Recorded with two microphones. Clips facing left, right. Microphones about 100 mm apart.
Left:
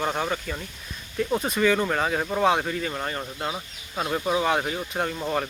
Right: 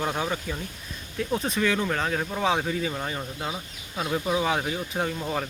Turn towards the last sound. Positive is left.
turn(degrees=5)  # may be behind; listen again after turning